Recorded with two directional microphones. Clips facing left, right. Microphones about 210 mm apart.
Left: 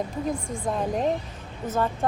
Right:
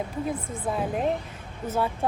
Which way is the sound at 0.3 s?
5° right (ahead or behind).